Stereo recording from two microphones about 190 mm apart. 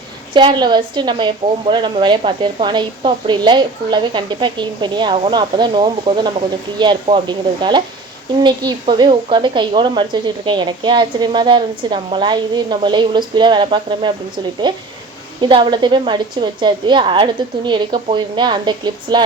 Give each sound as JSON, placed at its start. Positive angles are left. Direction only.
{"t": 0.3, "sound": "a woman's voice", "side_deg": -25}